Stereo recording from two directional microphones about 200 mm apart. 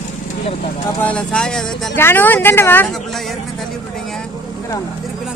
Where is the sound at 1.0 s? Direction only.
5° left (ahead or behind).